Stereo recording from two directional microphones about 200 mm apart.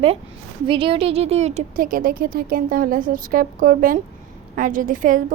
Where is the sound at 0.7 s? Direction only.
25° right (ahead or behind).